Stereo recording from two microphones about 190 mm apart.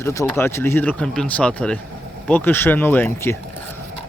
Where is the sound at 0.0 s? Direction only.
15° left (ahead or behind).